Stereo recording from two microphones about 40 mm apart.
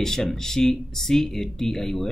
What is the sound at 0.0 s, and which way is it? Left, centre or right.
Speech, centre.